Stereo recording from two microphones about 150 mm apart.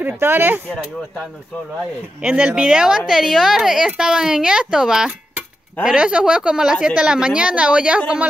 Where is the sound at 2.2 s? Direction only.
10° right (ahead or behind).